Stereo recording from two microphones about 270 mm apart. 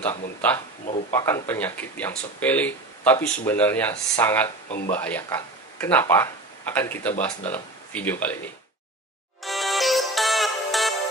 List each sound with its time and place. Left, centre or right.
1.1 s speech: centre
4.6 s speech: left
4.9 s speech: centre
9.4 s music: centre